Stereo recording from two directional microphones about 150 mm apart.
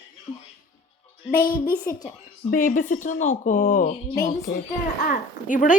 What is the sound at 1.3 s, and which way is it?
Speech, 75° left (ahead or behind).